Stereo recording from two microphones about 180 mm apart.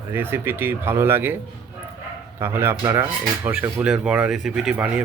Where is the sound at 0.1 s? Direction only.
10° right (ahead or behind).